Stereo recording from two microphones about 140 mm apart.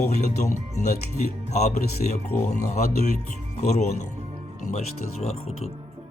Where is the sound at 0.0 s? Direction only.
60° left (ahead or behind).